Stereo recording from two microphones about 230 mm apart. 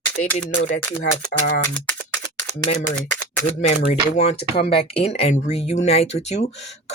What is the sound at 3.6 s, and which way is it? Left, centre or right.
Speech, left.